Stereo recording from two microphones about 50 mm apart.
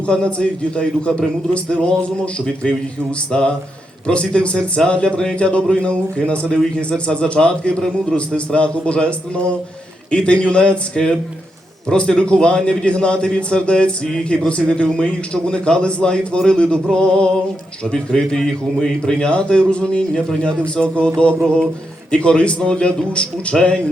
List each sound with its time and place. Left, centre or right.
0.0 s a man's voice: centre
3.3 s a man's voice: centre